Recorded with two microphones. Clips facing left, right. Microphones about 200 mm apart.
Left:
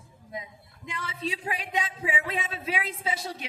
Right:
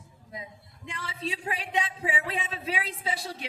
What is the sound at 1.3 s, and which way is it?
A woman's voice, 30° right (ahead or behind).